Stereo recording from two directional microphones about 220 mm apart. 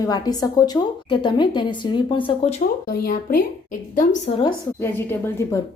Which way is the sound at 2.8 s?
45° left (ahead or behind).